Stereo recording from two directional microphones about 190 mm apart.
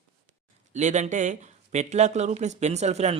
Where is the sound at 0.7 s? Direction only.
40° right (ahead or behind).